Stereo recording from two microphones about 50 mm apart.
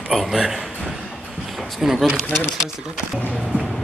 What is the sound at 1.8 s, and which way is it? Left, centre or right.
Speech, centre.